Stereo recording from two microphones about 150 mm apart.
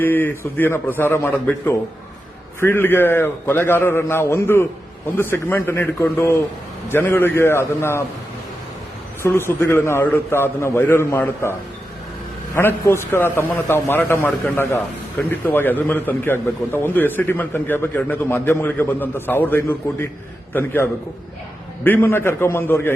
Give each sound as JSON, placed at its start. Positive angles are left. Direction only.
{"t": 0.0, "sound": "a man's voice", "side_deg": 15}
{"t": 9.2, "sound": "a man's voice", "side_deg": 15}
{"t": 12.5, "sound": "a man's voice", "side_deg": 15}
{"t": 21.8, "sound": "a man's voice", "side_deg": 15}